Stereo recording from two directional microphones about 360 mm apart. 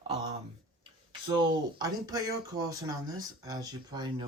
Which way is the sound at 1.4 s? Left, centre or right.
Centre.